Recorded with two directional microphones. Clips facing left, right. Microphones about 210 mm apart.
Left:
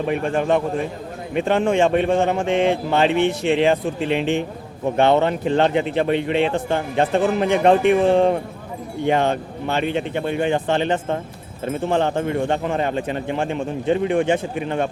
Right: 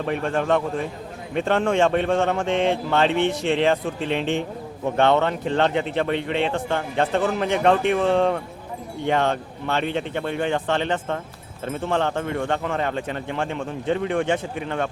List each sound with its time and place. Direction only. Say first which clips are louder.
0.0 s speech: left 3 dB; 10° left (ahead or behind)